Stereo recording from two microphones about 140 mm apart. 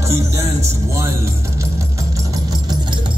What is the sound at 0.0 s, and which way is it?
Speech, 20° right (ahead or behind).